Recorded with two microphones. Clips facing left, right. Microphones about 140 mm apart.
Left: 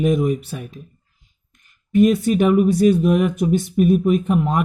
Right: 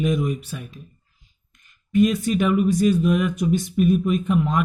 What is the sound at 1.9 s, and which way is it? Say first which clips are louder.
Speech: left 4 dB; 55° left (ahead or behind).